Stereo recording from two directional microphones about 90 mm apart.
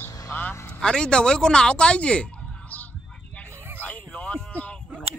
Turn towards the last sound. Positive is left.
turn(degrees=15)  # may be behind; listen again after turning